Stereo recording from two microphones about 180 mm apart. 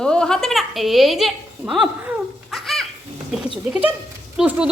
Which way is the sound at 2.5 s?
Centre (ahead or behind).